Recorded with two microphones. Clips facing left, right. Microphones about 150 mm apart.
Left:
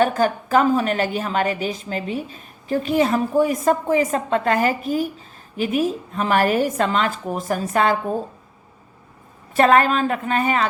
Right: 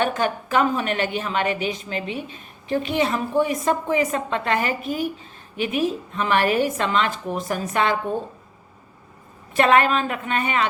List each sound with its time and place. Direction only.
0.0 s a woman's voice: 40° left (ahead or behind)
9.6 s a woman's voice: 40° left (ahead or behind)